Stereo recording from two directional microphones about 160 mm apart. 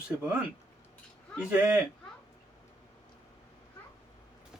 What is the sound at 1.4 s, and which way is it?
Speech, 5° right (ahead or behind).